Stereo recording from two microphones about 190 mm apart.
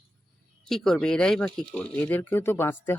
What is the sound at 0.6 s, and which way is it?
Speech, centre (ahead or behind).